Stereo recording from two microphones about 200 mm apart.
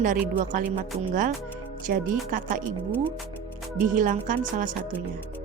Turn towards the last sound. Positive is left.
turn(degrees=-40)  # may be behind; listen again after turning